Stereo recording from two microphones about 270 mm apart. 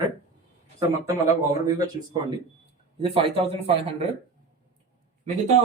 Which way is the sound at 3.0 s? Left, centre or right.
Right.